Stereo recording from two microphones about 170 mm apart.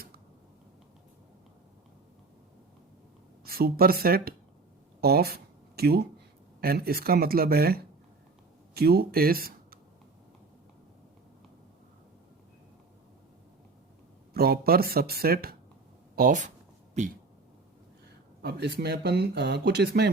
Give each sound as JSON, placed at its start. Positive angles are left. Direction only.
{"t": 3.4, "sound": "speech", "side_deg": -65}
{"t": 14.3, "sound": "speech", "side_deg": -65}
{"t": 16.1, "sound": "speech", "side_deg": -50}
{"t": 18.4, "sound": "speech", "side_deg": -75}